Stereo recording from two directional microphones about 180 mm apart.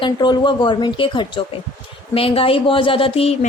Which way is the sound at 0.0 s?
25° left (ahead or behind).